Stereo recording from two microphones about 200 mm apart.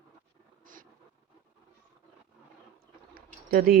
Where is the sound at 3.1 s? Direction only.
45° right (ahead or behind).